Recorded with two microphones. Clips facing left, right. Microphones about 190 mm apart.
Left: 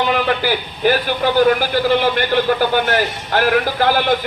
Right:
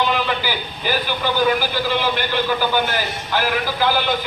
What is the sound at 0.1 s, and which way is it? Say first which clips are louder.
A man's voice: left 5 dB; 60° left (ahead or behind).